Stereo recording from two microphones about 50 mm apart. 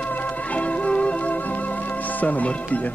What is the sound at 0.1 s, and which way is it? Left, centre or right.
Music, left.